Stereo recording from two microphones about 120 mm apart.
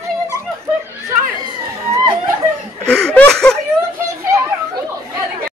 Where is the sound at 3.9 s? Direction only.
25° right (ahead or behind).